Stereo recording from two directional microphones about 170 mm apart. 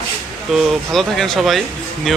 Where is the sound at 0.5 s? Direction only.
Centre (ahead or behind).